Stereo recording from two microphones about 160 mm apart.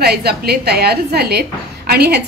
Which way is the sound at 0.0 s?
85° right.